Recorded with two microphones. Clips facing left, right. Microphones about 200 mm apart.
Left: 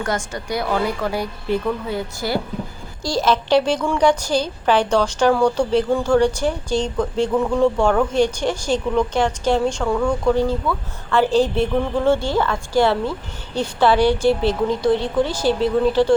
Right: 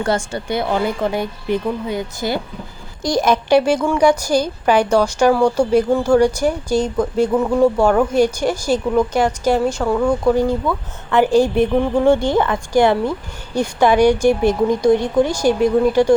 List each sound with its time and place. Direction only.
0.0 s a woman's voice: 30° right (ahead or behind); by 16.1 s 15° right (ahead or behind)